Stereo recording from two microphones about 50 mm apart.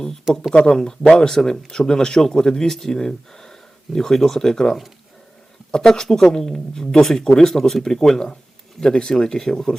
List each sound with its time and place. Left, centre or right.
0.5 s speech: centre